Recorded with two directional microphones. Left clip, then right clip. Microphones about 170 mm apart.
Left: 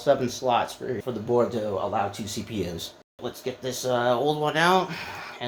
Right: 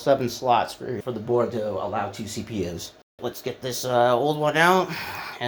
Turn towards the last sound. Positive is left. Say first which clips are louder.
# right 3 dB
turn(degrees=-40)  # may be behind; listen again after turning